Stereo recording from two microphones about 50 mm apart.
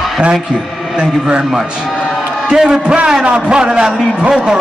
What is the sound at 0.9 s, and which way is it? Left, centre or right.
A man's voice, centre.